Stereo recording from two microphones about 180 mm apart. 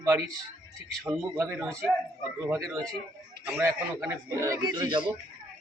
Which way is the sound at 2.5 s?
Centre (ahead or behind).